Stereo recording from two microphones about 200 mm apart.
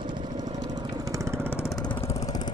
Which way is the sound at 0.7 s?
15° right (ahead or behind).